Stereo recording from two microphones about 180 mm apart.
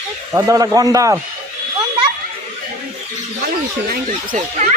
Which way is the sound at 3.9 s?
50° right (ahead or behind).